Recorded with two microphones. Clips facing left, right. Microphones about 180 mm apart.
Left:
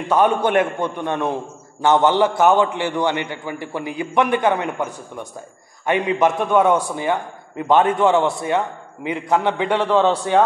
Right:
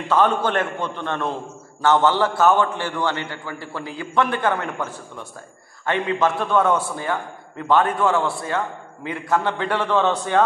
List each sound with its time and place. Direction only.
0.1 s a man's voice: 15° left (ahead or behind)